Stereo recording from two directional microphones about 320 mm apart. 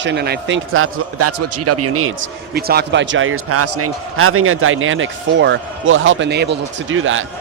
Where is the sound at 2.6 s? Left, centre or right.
Right.